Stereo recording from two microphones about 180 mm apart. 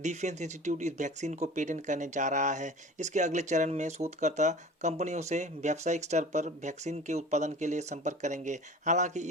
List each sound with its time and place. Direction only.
0.0 s speech: 40° right (ahead or behind)